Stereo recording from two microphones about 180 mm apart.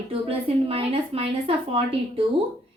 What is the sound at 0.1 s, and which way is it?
Speech, 30° right (ahead or behind).